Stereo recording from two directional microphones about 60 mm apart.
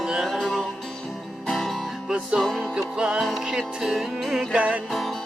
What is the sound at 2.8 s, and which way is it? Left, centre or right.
Music, centre.